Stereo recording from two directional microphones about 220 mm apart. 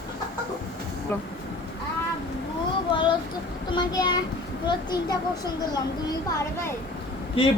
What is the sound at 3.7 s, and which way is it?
A child's voice, 20° left (ahead or behind).